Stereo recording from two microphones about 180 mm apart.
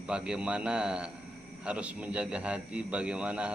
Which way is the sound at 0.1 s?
5° right (ahead or behind).